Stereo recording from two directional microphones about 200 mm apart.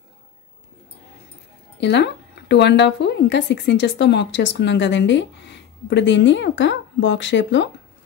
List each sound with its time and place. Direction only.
1.8 s speech: 60° left (ahead or behind)